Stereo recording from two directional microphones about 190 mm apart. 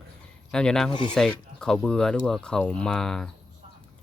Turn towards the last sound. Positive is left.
turn(degrees=5)  # may be behind; listen again after turning